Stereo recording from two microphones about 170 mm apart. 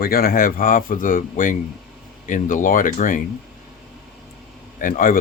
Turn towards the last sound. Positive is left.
turn(degrees=55)  # may be behind; listen again after turning